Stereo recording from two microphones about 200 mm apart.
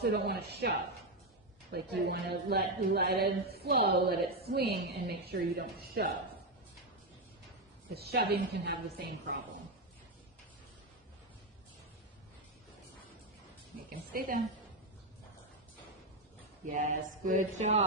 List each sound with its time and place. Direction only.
0.0 s a woman's voice: 55° right (ahead or behind)
7.9 s a woman's voice: 55° right (ahead or behind)
13.9 s a woman's voice: 45° right (ahead or behind)
17.2 s speech: 40° right (ahead or behind)